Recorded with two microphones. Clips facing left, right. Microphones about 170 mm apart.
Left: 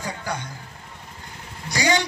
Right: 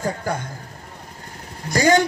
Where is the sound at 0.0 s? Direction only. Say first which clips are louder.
Right 5 dB; 50° right (ahead or behind).